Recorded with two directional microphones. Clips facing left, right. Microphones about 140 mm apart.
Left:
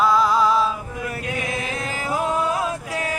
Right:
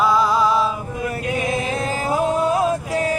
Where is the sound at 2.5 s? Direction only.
35° right (ahead or behind).